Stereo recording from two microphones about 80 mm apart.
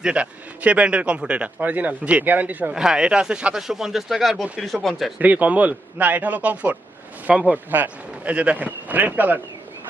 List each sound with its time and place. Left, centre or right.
0.0 s speech: centre
2.7 s speech: centre
5.2 s speech: centre